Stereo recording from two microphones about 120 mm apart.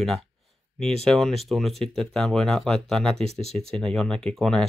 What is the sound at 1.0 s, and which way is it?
Speech, centre (ahead or behind).